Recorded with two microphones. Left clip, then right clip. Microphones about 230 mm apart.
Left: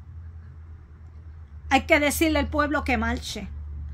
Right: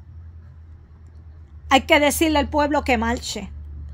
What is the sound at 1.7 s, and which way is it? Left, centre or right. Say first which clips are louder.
A woman's voice: right 4 dB; centre.